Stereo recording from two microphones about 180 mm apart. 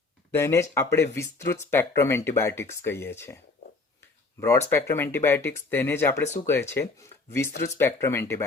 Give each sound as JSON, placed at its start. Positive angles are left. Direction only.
{"t": 0.3, "sound": "speech", "side_deg": 15}
{"t": 4.4, "sound": "speech", "side_deg": 15}